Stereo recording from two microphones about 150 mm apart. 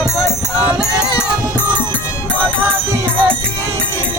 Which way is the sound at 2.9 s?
10° right (ahead or behind).